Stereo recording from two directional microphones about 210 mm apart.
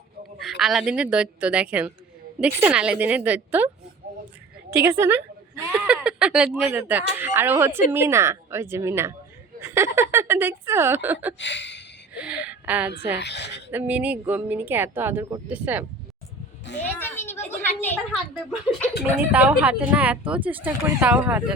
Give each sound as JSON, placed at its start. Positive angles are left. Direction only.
{"t": 0.3, "sound": "a woman's voice", "side_deg": 0}
{"t": 4.7, "sound": "speech", "side_deg": -10}
{"t": 11.3, "sound": "a sound", "side_deg": 60}
{"t": 12.1, "sound": "a sound", "side_deg": -5}
{"t": 13.1, "sound": "speech", "side_deg": 55}
{"t": 13.7, "sound": "speech", "side_deg": -10}
{"t": 16.9, "sound": "a sound", "side_deg": 10}
{"t": 17.7, "sound": "a woman's voice", "side_deg": 10}
{"t": 19.3, "sound": "speech", "side_deg": -5}